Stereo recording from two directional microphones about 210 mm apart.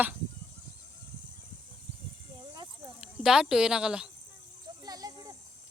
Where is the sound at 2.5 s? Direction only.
20° right (ahead or behind).